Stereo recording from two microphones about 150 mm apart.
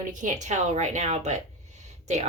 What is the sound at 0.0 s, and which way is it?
Speech, 60° right (ahead or behind).